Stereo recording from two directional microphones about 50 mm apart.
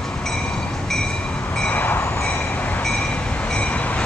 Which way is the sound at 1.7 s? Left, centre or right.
Left.